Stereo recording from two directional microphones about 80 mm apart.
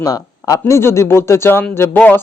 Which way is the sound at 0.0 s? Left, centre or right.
Left.